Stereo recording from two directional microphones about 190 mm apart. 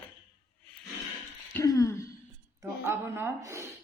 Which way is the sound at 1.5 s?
20° left (ahead or behind).